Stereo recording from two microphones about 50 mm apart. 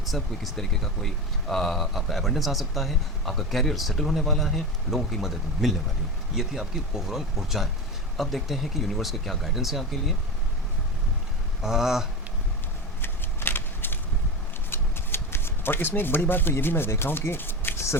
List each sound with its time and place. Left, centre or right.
0.0 s speech: centre
11.6 s speech: centre
13.0 s a sound: left
14.7 s shuffling cards: left